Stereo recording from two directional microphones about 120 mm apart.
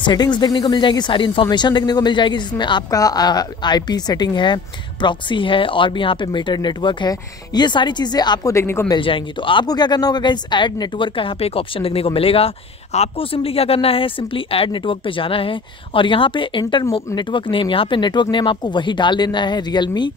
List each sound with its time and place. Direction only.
0.0 s speech: 40° left (ahead or behind)
8.5 s speech: 20° left (ahead or behind)
8.9 s speech: 45° left (ahead or behind)